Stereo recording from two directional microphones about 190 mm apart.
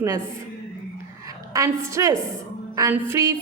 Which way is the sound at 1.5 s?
15° right (ahead or behind).